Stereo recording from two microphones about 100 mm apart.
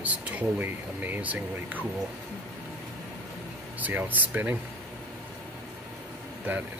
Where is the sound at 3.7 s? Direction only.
15° right (ahead or behind).